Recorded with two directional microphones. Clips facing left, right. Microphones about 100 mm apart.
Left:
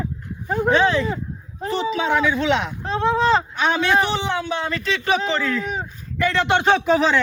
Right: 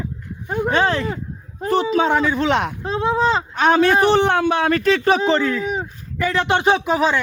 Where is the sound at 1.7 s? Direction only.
50° right (ahead or behind).